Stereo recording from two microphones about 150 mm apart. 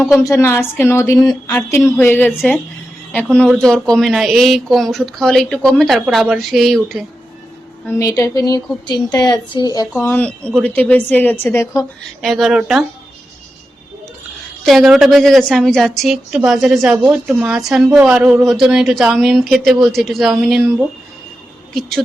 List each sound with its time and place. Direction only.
0.3 s speech: 15° left (ahead or behind)
1.8 s speech: 10° left (ahead or behind)
7.9 s a woman's voice: 20° left (ahead or behind)
9.9 s speech: 15° left (ahead or behind)
12.2 s speech: centre (ahead or behind)
14.6 s speech: centre (ahead or behind)
21.8 s speech: centre (ahead or behind)